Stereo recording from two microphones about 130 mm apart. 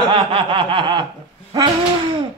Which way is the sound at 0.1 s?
40° right (ahead or behind).